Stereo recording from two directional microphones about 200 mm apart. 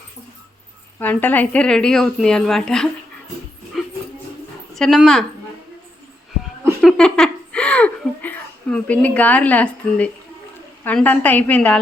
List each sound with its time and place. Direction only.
0.9 s a woman's voice: 10° left (ahead or behind)
3.7 s dog: centre (ahead or behind)
4.7 s speech: centre (ahead or behind)
6.8 s a sound: 5° left (ahead or behind)
10.8 s a woman's voice: 10° left (ahead or behind)